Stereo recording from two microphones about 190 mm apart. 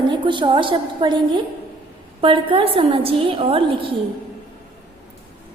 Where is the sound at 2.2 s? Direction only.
25° right (ahead or behind).